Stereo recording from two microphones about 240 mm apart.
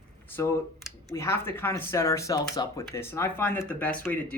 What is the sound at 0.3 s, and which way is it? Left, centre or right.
Speech, centre.